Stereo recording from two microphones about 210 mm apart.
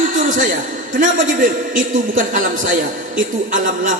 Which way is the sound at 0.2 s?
40° right (ahead or behind).